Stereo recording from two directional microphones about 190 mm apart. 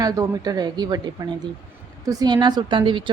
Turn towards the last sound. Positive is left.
turn(degrees=-25)  # may be behind; listen again after turning